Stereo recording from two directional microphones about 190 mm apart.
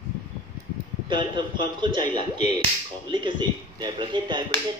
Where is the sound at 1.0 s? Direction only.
25° right (ahead or behind).